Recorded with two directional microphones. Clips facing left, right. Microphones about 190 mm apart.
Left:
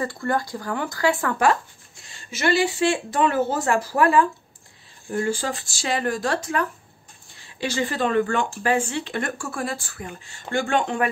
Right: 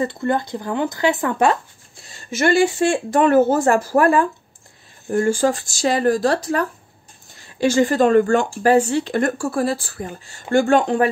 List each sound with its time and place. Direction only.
0.0 s speech: 20° right (ahead or behind)
2.0 s speech: 45° right (ahead or behind)